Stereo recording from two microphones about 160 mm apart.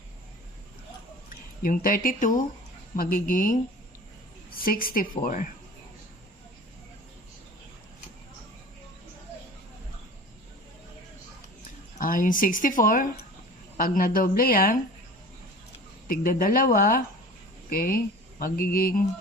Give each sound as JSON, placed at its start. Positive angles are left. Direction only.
{"t": 1.6, "sound": "speech", "side_deg": 60}
{"t": 4.6, "sound": "speech", "side_deg": 65}
{"t": 11.9, "sound": "speech", "side_deg": 60}
{"t": 16.0, "sound": "speech", "side_deg": 60}